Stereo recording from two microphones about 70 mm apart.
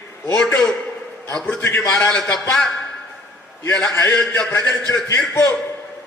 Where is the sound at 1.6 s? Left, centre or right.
Left.